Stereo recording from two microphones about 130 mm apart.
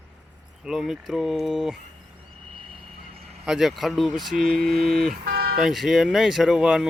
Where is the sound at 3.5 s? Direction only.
5° right (ahead or behind).